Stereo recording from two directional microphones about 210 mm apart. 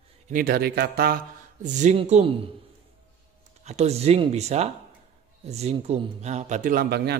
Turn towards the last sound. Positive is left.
turn(degrees=-50)  # may be behind; listen again after turning